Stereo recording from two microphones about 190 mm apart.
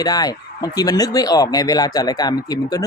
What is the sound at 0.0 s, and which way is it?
Speech, 20° left (ahead or behind).